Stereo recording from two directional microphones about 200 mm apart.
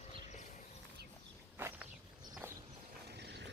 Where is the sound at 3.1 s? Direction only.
55° right (ahead or behind).